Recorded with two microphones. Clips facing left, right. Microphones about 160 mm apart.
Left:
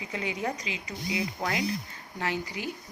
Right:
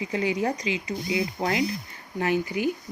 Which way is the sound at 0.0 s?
30° right (ahead or behind).